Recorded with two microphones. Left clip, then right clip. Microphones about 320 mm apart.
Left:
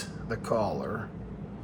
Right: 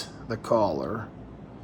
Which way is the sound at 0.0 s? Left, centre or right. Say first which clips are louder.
Right 1 dB; right.